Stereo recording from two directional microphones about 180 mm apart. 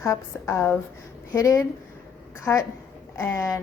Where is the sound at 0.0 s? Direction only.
15° left (ahead or behind).